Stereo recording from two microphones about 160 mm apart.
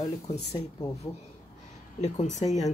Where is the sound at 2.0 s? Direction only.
45° left (ahead or behind).